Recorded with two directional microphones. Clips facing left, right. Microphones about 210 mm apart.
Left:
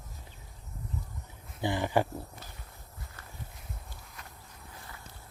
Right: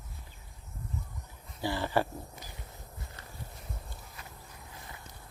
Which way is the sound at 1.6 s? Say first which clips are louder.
Left 2 dB; 15° left (ahead or behind).